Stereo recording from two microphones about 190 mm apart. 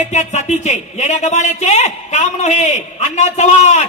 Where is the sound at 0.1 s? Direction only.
40° left (ahead or behind).